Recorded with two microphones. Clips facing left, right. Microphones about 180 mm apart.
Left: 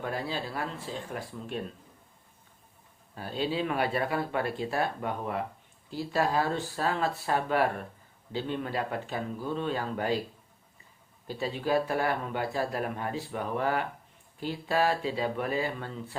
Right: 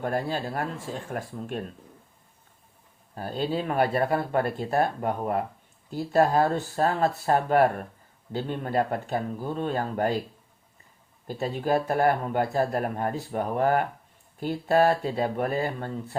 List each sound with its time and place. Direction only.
0.0 s speech: 50° right (ahead or behind)
3.2 s speech: 45° right (ahead or behind)
11.3 s speech: 50° right (ahead or behind)